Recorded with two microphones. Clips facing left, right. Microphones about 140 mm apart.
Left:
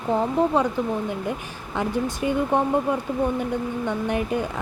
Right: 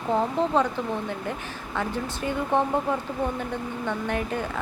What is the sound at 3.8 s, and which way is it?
Speech, 15° left (ahead or behind).